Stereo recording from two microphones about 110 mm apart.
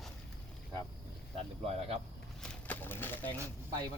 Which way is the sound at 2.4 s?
15° left (ahead or behind).